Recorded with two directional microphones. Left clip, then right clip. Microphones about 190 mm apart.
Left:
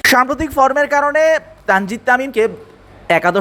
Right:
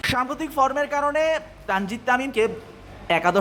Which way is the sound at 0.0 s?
45° left (ahead or behind).